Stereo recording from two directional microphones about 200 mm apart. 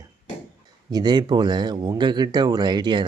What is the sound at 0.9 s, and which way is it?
Speech, 20° right (ahead or behind).